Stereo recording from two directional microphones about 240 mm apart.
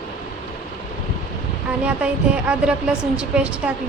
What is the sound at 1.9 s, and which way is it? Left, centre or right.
Speech, centre.